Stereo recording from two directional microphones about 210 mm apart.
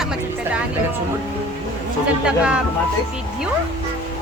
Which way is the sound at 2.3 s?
5° right (ahead or behind).